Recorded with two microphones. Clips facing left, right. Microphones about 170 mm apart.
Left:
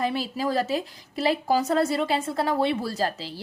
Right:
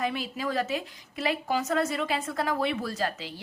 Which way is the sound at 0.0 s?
35° left (ahead or behind).